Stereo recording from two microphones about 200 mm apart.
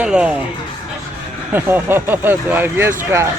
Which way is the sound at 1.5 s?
10° right (ahead or behind).